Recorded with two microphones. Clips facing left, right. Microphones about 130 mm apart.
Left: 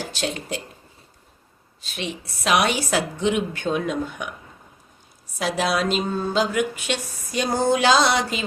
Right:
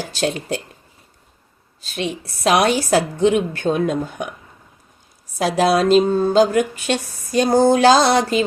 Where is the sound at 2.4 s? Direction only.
40° right (ahead or behind).